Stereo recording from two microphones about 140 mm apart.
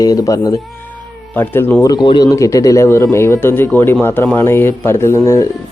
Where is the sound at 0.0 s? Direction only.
25° left (ahead or behind).